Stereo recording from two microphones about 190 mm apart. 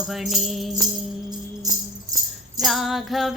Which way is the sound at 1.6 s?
20° right (ahead or behind).